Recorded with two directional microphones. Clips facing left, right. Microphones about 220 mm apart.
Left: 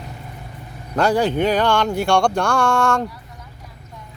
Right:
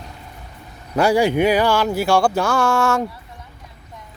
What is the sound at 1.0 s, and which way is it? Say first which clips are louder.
Speech: right 2 dB; 10° right (ahead or behind).